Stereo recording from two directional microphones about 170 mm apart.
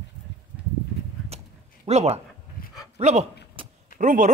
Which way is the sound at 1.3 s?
40° right (ahead or behind).